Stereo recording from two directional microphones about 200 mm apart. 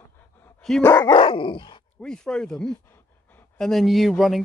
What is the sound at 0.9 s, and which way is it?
Dog, 20° left (ahead or behind).